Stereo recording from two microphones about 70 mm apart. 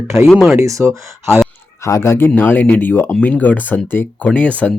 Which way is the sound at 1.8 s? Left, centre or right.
Left.